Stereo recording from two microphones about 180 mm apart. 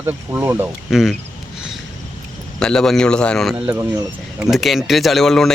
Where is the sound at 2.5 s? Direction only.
5° left (ahead or behind).